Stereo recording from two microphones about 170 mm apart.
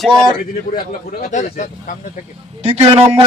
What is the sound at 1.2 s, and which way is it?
Speech, 45° left (ahead or behind).